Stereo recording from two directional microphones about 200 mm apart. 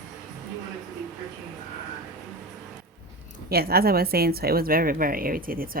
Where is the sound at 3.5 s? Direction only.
50° right (ahead or behind).